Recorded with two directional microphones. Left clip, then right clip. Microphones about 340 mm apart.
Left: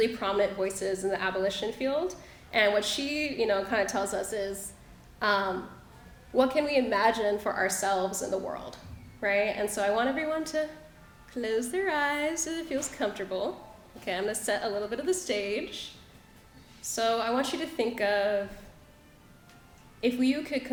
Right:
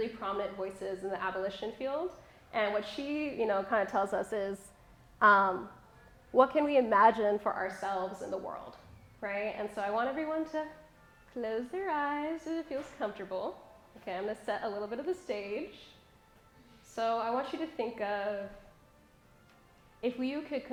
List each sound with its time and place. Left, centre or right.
0.0 s a woman's voice: centre; by 4.5 s right
6.3 s a woman's voice: centre
7.5 s a woman's voice: centre
16.9 s a woman's voice: centre
20.0 s a woman's voice: centre